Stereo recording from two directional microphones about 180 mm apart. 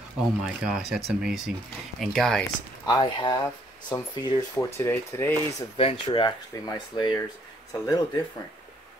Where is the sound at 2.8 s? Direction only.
25° left (ahead or behind).